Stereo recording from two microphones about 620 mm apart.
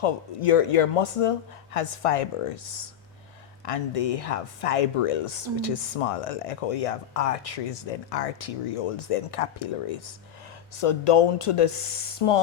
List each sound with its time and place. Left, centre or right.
0.0 s speech: left
3.7 s speech: left